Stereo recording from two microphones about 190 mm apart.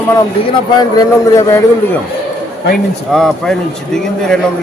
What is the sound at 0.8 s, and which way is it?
Speech, 20° left (ahead or behind).